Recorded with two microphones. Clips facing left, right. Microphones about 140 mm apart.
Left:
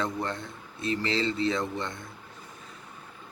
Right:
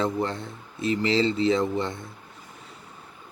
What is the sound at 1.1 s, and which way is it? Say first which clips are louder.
Speech: right 6 dB; 30° right (ahead or behind).